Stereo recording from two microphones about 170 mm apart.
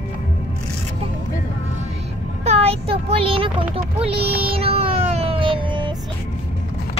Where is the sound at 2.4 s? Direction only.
35° right (ahead or behind).